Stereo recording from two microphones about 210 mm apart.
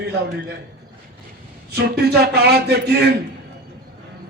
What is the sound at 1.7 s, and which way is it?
A man's voice, 50° right (ahead or behind).